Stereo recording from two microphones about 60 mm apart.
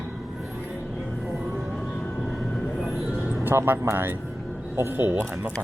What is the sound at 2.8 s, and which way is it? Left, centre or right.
Music, centre.